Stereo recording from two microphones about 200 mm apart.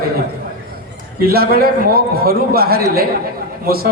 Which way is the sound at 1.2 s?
50° right (ahead or behind).